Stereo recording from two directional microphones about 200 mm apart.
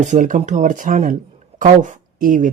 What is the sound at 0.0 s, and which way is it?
Speech, 40° right (ahead or behind).